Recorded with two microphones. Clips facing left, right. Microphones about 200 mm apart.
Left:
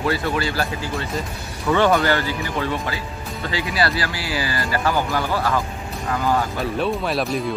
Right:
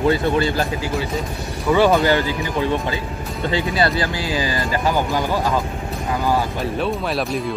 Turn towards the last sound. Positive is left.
turn(degrees=0)  # may be behind; listen again after turning